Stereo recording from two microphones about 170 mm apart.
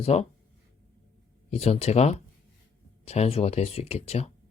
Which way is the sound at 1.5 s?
35° left (ahead or behind).